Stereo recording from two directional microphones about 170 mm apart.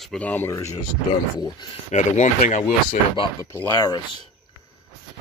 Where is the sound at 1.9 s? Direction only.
45° left (ahead or behind).